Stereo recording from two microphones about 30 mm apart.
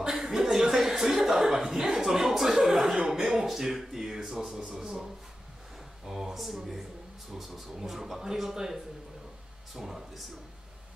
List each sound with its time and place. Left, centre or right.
0.1 s chuckle: centre
3.1 s a sound: centre
4.6 s speech: right
6.0 s a man's voice: centre